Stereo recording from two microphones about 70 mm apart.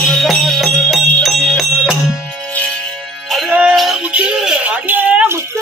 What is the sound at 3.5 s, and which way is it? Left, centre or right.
Music, centre.